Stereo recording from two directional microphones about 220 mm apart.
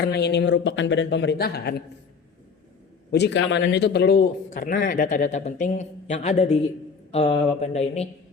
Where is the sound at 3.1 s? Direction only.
50° left (ahead or behind).